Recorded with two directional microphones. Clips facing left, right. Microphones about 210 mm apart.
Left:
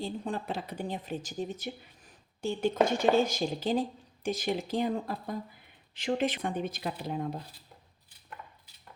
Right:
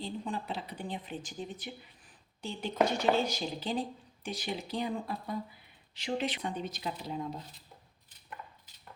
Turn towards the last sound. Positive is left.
turn(degrees=55)  # may be behind; listen again after turning